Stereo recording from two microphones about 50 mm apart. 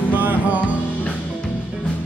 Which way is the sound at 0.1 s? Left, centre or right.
Right.